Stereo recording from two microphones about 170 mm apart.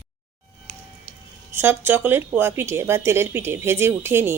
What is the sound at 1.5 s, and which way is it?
Speech, 15° right (ahead or behind).